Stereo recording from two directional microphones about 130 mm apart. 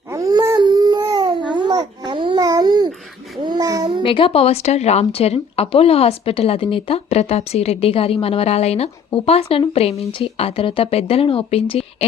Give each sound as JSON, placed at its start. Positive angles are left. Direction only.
{"t": 0.1, "sound": "dog", "side_deg": -30}
{"t": 1.5, "sound": "babbling", "side_deg": -35}
{"t": 3.4, "sound": "child singing", "side_deg": -30}
{"t": 4.0, "sound": "speech", "side_deg": 45}